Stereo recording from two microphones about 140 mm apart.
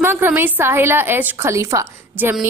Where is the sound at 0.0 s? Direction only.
15° right (ahead or behind).